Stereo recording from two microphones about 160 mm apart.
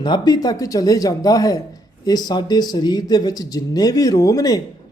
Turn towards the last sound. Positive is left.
turn(degrees=25)  # may be behind; listen again after turning